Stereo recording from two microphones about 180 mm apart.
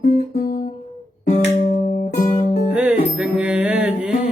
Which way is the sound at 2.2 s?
50° left (ahead or behind).